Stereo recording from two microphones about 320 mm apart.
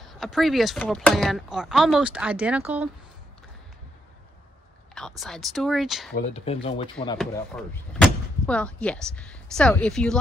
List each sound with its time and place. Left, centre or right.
0.0 s speech: centre
4.9 s speech: centre
6.3 s speech: centre
7.2 s speech: centre